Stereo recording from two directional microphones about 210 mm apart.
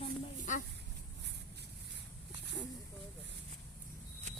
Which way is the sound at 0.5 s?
35° left (ahead or behind).